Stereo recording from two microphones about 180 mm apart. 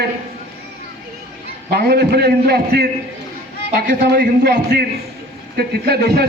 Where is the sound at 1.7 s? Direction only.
65° right (ahead or behind).